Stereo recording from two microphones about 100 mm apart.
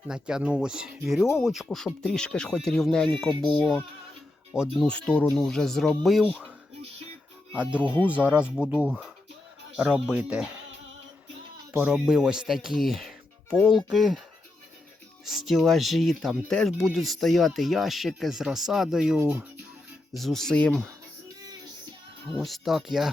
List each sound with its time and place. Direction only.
0.1 s speech: 5° right (ahead or behind)
4.9 s speech: 10° left (ahead or behind); by 6.5 s 5° right (ahead or behind)
7.5 s speech: 10° right (ahead or behind)
11.9 s speech: 5° right (ahead or behind)
15.2 s speech: centre (ahead or behind)
22.4 s speech: centre (ahead or behind)